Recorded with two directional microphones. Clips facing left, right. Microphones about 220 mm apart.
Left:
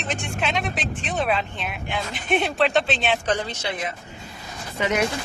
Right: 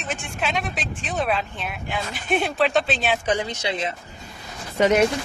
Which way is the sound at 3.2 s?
10° right (ahead or behind).